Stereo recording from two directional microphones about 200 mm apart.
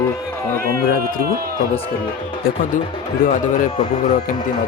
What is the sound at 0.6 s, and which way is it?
Speech, 50° right (ahead or behind).